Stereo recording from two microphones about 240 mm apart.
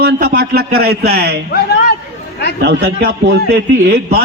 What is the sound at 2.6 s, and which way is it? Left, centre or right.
A man's voice, right.